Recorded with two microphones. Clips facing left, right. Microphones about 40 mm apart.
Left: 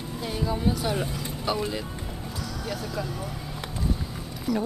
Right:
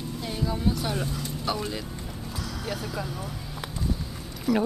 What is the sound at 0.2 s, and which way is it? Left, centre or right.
Speech, centre.